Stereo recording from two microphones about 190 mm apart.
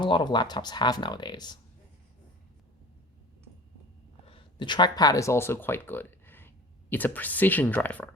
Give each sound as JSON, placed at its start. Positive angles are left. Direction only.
{"t": 0.0, "sound": "speech", "side_deg": 25}
{"t": 4.3, "sound": "speech", "side_deg": 25}